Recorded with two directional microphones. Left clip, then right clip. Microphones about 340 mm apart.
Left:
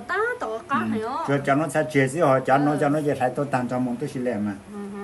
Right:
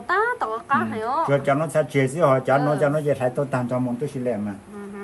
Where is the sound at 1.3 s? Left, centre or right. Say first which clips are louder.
Left 2 dB; centre.